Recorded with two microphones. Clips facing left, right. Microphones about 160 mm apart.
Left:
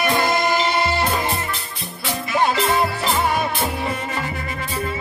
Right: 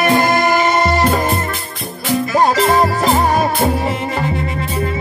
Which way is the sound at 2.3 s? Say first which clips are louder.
Right 5 dB; 40° right (ahead or behind).